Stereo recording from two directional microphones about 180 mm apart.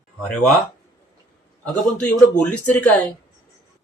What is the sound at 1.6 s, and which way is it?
A child's voice, 5° left (ahead or behind).